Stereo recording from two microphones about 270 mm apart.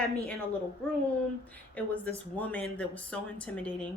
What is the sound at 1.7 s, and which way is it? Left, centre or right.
Speech, centre.